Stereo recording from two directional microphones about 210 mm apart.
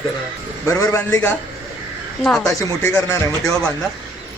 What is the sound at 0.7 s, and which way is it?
Speech, 15° left (ahead or behind).